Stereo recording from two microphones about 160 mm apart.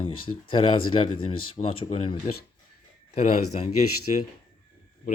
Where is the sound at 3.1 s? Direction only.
45° left (ahead or behind).